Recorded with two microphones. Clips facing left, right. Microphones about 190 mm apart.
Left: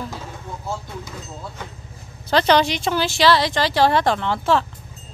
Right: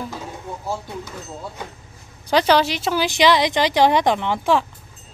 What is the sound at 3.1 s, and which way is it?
Speech, 15° right (ahead or behind).